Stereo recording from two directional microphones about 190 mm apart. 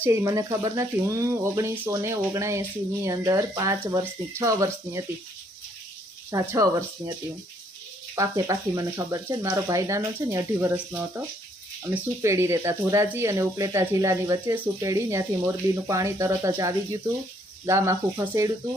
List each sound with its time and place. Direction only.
0.0 s speech: 15° right (ahead or behind)
6.5 s speech: 15° right (ahead or behind)
8.1 s speech: 15° right (ahead or behind)
12.2 s speech: 15° right (ahead or behind)